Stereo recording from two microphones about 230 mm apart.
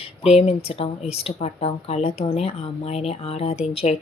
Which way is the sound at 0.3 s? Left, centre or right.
Left.